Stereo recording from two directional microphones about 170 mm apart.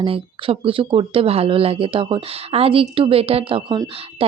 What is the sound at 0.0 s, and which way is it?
Speech, 30° right (ahead or behind).